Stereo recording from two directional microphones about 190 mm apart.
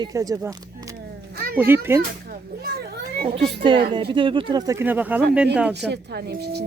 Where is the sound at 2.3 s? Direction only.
50° right (ahead or behind).